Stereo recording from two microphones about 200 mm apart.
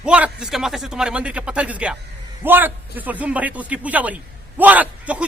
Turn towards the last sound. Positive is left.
turn(degrees=-5)  # may be behind; listen again after turning